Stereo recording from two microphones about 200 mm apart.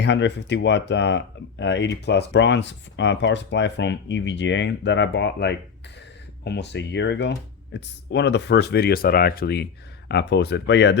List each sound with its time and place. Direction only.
0.0 s speech: 60° left (ahead or behind)